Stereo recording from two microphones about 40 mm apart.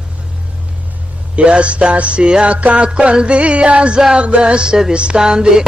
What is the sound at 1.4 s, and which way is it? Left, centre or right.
Music, right.